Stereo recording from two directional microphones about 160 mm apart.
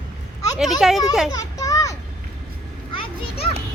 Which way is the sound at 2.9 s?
35° left (ahead or behind).